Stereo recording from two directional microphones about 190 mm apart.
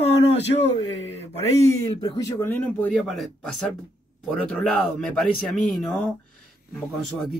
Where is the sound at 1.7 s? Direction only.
20° left (ahead or behind); by 6.0 s 5° left (ahead or behind).